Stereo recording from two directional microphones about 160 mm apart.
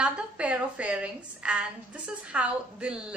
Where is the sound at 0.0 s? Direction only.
10° right (ahead or behind).